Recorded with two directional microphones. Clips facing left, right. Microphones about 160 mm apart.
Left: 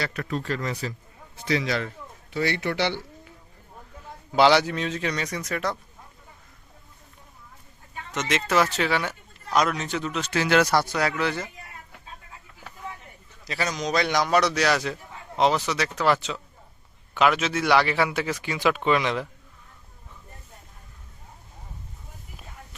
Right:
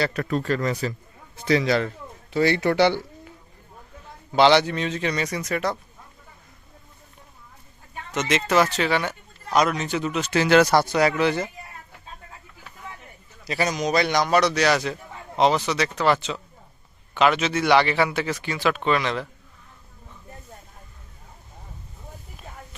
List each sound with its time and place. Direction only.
0.0 s a man's voice: 35° right (ahead or behind)
4.3 s speech: 5° left (ahead or behind)
8.1 s speech: centre (ahead or behind)
10.3 s speech: 25° right (ahead or behind)
13.4 s speech: 15° right (ahead or behind); by 19.3 s 15° left (ahead or behind)